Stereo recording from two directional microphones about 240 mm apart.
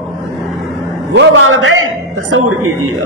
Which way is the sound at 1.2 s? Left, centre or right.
Right.